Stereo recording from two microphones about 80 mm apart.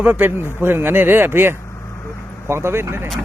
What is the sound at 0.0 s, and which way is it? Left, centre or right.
Speech, right.